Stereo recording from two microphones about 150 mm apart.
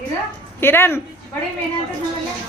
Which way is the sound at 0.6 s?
15° left (ahead or behind).